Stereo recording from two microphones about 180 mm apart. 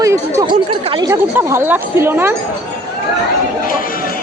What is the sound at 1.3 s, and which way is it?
Speech, 10° right (ahead or behind).